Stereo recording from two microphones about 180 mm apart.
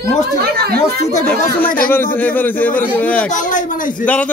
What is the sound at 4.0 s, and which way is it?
Speech, 10° left (ahead or behind).